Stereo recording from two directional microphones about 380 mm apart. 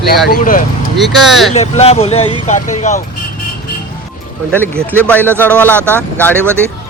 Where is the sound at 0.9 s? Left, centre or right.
Centre.